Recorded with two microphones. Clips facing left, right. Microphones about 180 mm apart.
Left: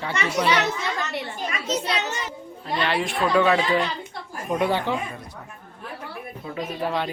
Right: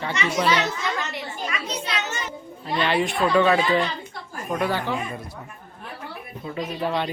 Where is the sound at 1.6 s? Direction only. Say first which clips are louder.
Left 4 dB; 40° left (ahead or behind).